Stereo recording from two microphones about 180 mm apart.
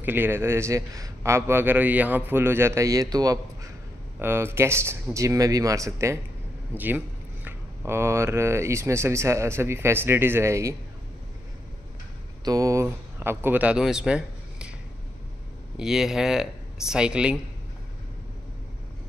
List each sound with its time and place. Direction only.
0.0 s a man's voice: 10° right (ahead or behind)
12.4 s speech: 20° right (ahead or behind)
15.8 s speech: 5° right (ahead or behind)